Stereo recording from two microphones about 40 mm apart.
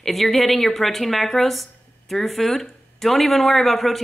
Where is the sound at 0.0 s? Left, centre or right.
Centre.